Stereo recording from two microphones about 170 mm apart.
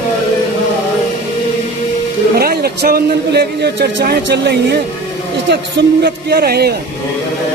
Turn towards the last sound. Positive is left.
turn(degrees=-65)  # may be behind; listen again after turning